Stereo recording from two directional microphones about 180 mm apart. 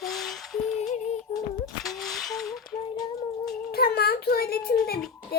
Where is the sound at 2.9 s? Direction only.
20° left (ahead or behind).